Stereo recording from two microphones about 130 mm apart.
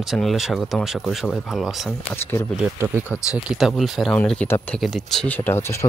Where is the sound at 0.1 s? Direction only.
Centre (ahead or behind).